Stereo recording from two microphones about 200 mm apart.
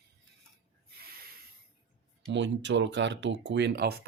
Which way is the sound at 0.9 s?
50° right (ahead or behind).